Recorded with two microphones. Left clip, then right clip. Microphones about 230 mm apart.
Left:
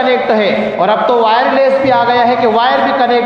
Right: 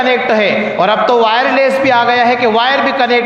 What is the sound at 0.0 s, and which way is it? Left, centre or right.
A man's voice, right.